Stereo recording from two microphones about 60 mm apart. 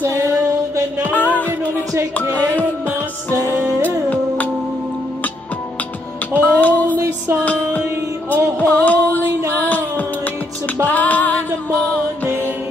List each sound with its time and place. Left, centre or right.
0.0 s a sound: right
1.1 s music: left
3.8 s music: left
6.4 s music: left
8.3 s music: left